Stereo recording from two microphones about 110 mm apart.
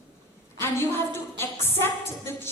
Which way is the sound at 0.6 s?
20° left (ahead or behind).